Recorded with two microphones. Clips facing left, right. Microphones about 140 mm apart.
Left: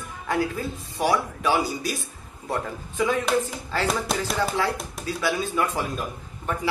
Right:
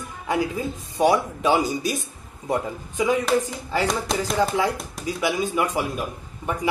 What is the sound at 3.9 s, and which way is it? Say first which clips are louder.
Speech: right 1 dB; centre (ahead or behind).